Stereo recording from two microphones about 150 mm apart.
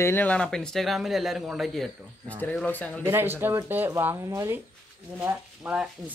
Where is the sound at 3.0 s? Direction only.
15° right (ahead or behind).